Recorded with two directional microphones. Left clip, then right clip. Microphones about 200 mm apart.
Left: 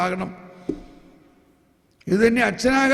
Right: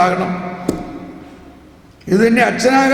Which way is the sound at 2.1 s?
45° left (ahead or behind).